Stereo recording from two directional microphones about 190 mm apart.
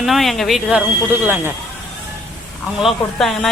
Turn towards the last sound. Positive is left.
turn(degrees=0)  # may be behind; listen again after turning